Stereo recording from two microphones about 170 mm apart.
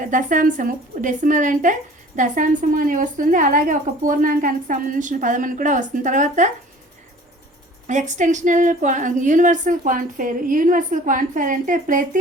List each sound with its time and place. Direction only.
0.0 s a woman's voice: 50° right (ahead or behind)
7.9 s a woman's voice: 45° right (ahead or behind)